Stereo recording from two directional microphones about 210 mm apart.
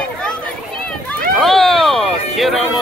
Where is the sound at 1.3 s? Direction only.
Centre (ahead or behind).